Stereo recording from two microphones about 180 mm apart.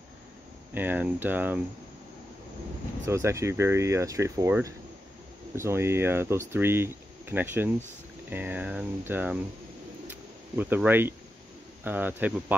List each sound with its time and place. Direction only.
0.7 s speech: 10° right (ahead or behind)
3.1 s speech: 15° right (ahead or behind)
10.0 s a sound: 10° right (ahead or behind)
11.8 s speech: 10° right (ahead or behind)